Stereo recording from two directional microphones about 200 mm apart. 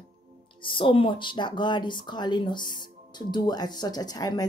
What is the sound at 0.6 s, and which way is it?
A woman's voice, 25° left (ahead or behind).